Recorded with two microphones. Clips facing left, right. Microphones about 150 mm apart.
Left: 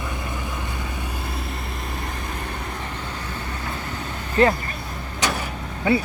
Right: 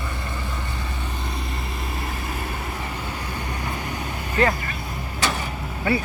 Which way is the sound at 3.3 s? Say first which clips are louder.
Right 1 dB; 15° right (ahead or behind).